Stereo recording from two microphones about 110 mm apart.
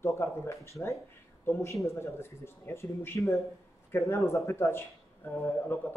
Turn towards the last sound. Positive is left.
turn(degrees=20)  # may be behind; listen again after turning